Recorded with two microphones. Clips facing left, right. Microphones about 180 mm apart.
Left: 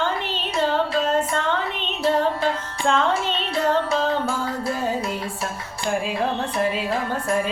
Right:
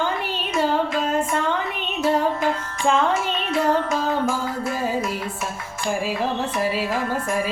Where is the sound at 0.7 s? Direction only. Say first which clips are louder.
Left 1 dB; 10° right (ahead or behind).